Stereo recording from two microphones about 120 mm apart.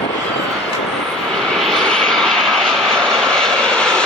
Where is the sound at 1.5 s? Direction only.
5° left (ahead or behind).